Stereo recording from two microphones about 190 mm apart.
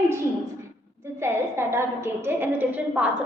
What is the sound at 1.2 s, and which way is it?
A woman's voice, 15° right (ahead or behind).